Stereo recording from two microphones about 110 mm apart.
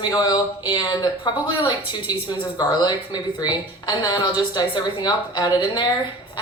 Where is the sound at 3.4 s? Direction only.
40° left (ahead or behind).